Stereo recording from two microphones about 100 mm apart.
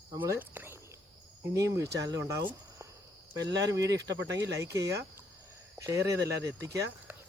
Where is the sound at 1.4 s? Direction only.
30° right (ahead or behind).